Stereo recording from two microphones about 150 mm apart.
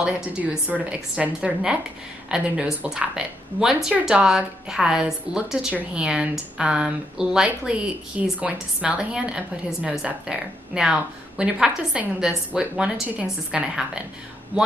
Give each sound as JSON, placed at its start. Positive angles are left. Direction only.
{"t": 0.0, "sound": "a woman's voice", "side_deg": -10}